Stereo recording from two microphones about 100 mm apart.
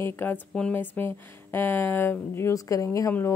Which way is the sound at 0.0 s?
20° left (ahead or behind).